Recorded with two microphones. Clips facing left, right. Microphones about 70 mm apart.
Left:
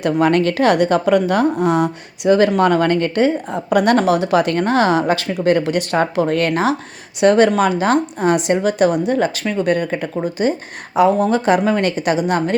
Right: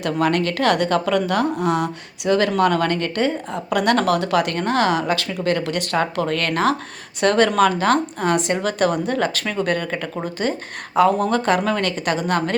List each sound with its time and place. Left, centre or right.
0.0 s a woman's voice: left
8.6 s speech: centre
9.8 s speech: centre